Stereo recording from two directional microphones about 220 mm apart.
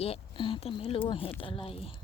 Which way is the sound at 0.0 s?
25° left (ahead or behind).